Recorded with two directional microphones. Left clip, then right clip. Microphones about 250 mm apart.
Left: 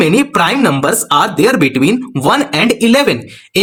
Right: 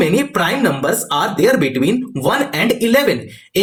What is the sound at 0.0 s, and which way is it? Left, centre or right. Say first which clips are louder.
Speech: left 5 dB; left.